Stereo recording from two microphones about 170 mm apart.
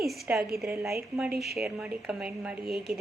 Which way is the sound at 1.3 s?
70° right (ahead or behind).